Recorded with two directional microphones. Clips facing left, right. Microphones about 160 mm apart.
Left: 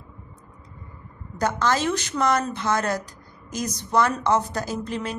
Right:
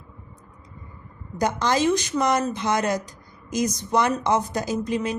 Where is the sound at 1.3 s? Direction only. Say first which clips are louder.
Even; 15° right (ahead or behind).